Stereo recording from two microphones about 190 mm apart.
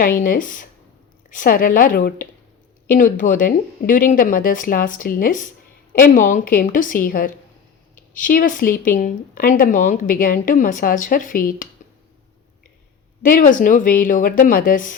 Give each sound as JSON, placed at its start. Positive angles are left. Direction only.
{"t": 0.2, "sound": "speech", "side_deg": 45}
{"t": 13.2, "sound": "speech", "side_deg": 45}